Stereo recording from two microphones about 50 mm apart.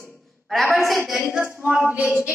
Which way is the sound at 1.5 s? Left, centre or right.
Right.